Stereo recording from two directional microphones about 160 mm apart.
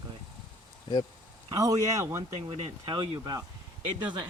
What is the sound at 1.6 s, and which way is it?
Speech, 20° right (ahead or behind).